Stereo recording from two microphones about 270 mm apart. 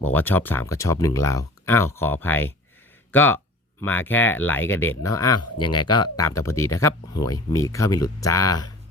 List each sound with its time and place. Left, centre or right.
0.0 s speech: centre
5.4 s speech: left
6.1 s speech: centre